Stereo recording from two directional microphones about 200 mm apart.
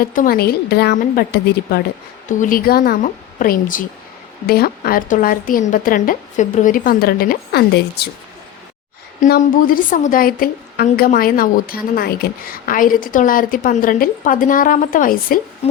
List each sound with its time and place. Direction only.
0.0 s a woman's voice: 45° left (ahead or behind)
9.2 s a woman's voice: 45° left (ahead or behind)